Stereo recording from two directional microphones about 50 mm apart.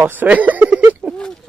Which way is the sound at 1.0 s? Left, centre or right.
Right.